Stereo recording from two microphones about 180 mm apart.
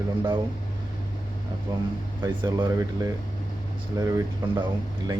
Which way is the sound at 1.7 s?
20° right (ahead or behind).